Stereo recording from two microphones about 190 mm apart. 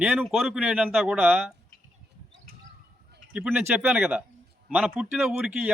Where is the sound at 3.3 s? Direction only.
5° right (ahead or behind).